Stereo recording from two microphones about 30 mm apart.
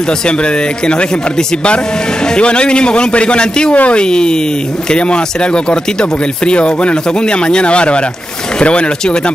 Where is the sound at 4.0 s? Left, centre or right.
Left.